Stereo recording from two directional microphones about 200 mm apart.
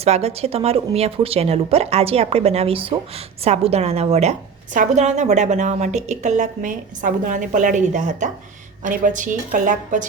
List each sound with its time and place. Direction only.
0.0 s a woman's voice: 30° right (ahead or behind)